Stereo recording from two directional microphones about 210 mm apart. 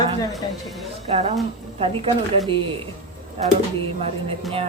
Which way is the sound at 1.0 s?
30° right (ahead or behind).